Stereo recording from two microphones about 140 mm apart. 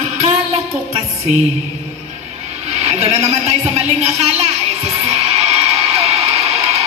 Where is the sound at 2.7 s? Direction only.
50° right (ahead or behind).